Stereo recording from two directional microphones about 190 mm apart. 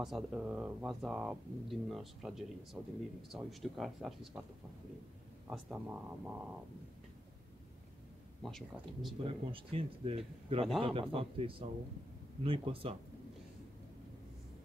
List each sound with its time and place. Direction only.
0.0 s speech: centre (ahead or behind)
5.5 s speech: 5° right (ahead or behind)
8.4 s speech: centre (ahead or behind)
9.2 s speech: 30° right (ahead or behind)